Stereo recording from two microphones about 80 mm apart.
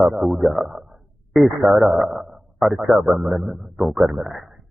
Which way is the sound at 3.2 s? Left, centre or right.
Right.